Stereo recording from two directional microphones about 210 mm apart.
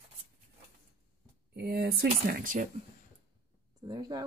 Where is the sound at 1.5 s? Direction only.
50° right (ahead or behind).